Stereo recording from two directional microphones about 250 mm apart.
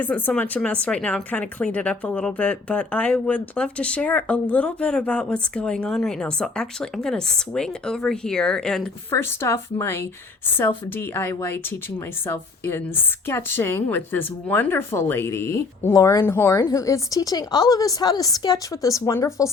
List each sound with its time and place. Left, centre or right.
0.0 s speech: centre